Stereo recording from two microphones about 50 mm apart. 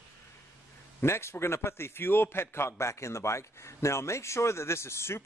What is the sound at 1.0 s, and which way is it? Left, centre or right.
A man's voice, left.